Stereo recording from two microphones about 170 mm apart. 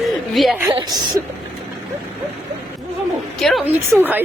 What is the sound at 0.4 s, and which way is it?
Speech, centre (ahead or behind).